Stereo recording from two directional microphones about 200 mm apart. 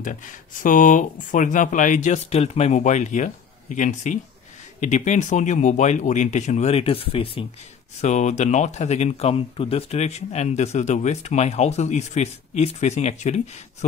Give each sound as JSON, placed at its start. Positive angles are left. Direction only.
{"t": 0.0, "sound": "speech", "side_deg": 40}